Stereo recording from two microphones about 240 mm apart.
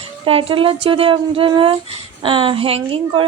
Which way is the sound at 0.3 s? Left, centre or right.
Right.